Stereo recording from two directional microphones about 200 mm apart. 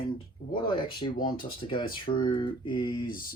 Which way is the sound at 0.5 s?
25° left (ahead or behind).